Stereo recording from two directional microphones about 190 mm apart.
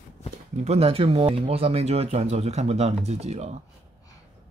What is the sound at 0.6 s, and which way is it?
Speech, 35° right (ahead or behind).